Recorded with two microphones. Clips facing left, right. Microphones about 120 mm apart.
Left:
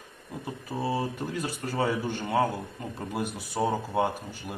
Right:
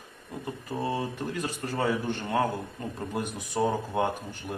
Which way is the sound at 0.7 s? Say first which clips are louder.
Left 1 dB; 10° left (ahead or behind).